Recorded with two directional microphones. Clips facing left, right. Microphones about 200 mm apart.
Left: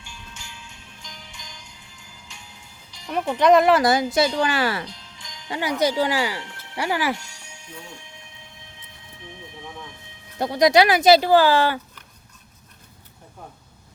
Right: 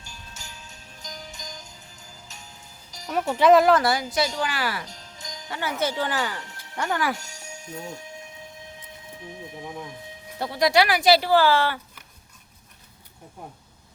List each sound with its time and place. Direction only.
0.0 s music: 40° right (ahead or behind)
3.3 s speech: 5° right (ahead or behind)
3.8 s speech: 20° left (ahead or behind)
4.9 s jingle bell: 45° right (ahead or behind)
5.5 s speech: 15° left (ahead or behind)
6.4 s music: 40° right (ahead or behind)
6.7 s speech: 10° left (ahead or behind)
7.2 s music: 45° right (ahead or behind)
10.4 s speech: 20° left (ahead or behind)